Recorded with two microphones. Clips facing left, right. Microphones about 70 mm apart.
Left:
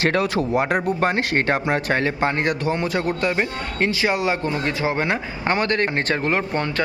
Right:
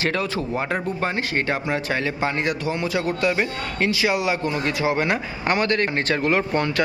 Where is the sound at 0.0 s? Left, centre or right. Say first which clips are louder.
Left 4 dB; left.